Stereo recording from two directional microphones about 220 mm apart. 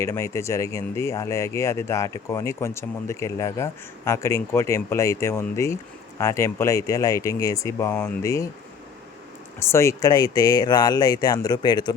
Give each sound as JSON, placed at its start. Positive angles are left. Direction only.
{"t": 0.0, "sound": "speech", "side_deg": 10}
{"t": 9.7, "sound": "speech", "side_deg": 15}